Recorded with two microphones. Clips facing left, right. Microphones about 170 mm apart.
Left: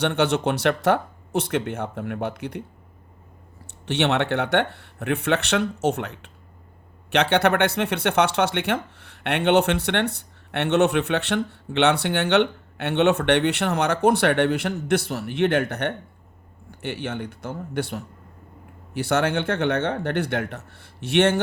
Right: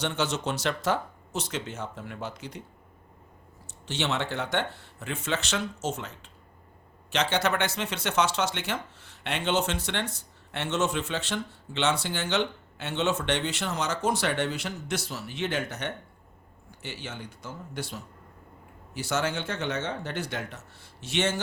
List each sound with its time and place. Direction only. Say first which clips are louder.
0.0 s speech: left 8 dB; 60° left (ahead or behind)
3.8 s speech: left 8 dB; 65° left (ahead or behind)